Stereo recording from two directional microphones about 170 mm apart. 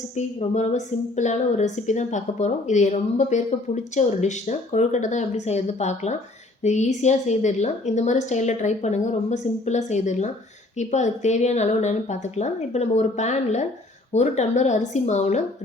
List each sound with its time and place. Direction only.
0.2 s a woman's voice: 45° left (ahead or behind)